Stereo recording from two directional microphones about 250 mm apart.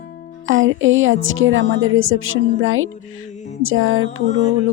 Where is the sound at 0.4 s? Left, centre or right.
Right.